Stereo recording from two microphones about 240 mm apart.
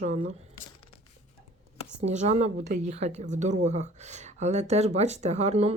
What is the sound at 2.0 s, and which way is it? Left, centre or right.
A woman's voice, right.